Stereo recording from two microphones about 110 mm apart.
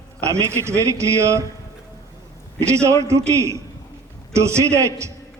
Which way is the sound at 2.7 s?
25° right (ahead or behind).